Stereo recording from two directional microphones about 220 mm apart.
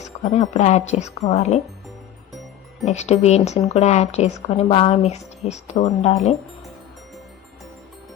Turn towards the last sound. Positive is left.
turn(degrees=30)  # may be behind; listen again after turning